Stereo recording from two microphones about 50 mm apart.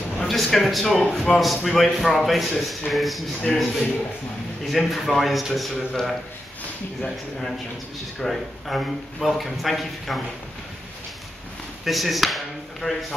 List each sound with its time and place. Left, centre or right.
0.3 s a man's voice: centre
11.8 s a man's voice: centre
12.8 s a man's voice: centre